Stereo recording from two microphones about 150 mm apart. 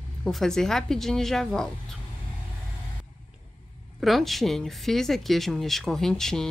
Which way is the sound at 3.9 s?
Centre (ahead or behind).